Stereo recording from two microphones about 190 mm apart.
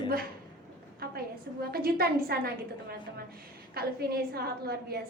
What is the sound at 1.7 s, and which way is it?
Speech, 55° right (ahead or behind).